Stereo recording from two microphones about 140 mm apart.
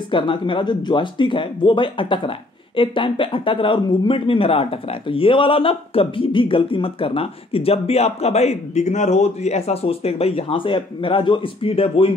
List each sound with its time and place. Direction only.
0.1 s speech: 35° left (ahead or behind)